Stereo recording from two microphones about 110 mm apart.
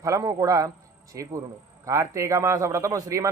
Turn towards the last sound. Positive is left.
turn(degrees=-30)  # may be behind; listen again after turning